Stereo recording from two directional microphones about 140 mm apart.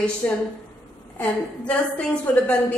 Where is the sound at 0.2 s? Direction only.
10° left (ahead or behind).